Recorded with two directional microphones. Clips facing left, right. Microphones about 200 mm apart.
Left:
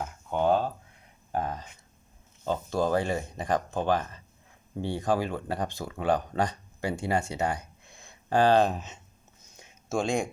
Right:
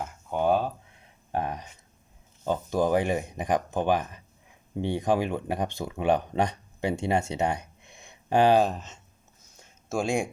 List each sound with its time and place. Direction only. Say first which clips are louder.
0.0 s a sound: even; 10° right (ahead or behind)
2.4 s speech: right 2 dB; 15° right (ahead or behind)
8.6 s speech: even; 5° left (ahead or behind)
9.9 s speech: right 1 dB; 10° right (ahead or behind)